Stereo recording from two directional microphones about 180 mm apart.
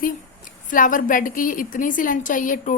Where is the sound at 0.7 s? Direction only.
45° left (ahead or behind).